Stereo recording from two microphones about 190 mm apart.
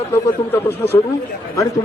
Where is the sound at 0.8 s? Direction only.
10° left (ahead or behind).